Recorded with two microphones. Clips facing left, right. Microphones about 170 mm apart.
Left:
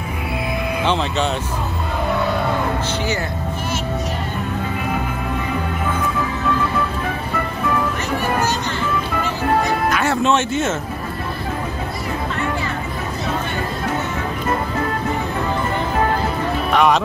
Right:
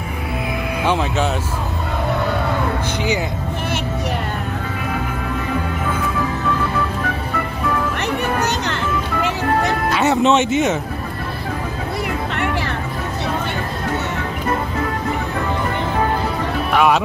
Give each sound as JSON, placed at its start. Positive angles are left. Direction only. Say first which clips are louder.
{"t": 0.8, "sound": "speech", "louder": "right 2 dB", "side_deg": -10}
{"t": 8.6, "sound": "music", "louder": "even", "side_deg": -75}
{"t": 9.8, "sound": "music", "louder": "right 6 dB", "side_deg": -20}
{"t": 16.7, "sound": "speech", "louder": "even", "side_deg": -5}